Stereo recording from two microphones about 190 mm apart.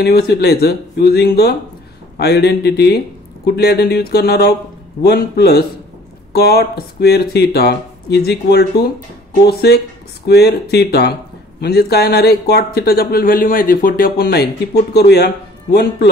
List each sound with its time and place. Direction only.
0.0 s speech: 55° left (ahead or behind)